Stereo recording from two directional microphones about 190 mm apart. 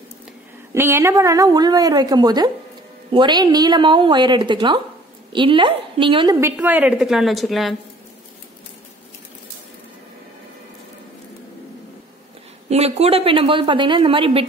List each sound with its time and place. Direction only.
0.7 s a woman's voice: 10° right (ahead or behind)
6.4 s a woman's voice: 10° right (ahead or behind)
12.6 s a woman's voice: 35° right (ahead or behind)